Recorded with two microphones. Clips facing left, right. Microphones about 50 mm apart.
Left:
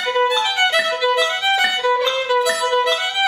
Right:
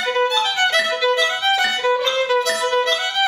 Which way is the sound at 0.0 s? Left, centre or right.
Centre.